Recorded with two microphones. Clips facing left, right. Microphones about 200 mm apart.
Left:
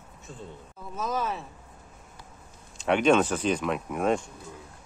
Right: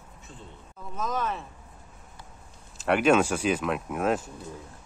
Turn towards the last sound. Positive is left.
turn(degrees=-5)  # may be behind; listen again after turning